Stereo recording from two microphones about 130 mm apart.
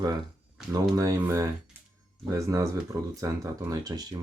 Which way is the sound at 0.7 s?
25° right (ahead or behind).